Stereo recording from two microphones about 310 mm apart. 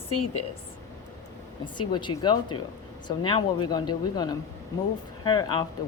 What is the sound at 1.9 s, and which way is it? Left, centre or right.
A woman's voice, centre.